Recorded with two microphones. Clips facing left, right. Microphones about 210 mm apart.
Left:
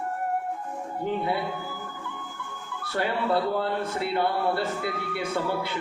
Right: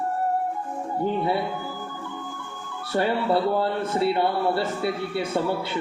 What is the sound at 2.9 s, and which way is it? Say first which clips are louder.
Speech: right 3 dB; 25° right (ahead or behind).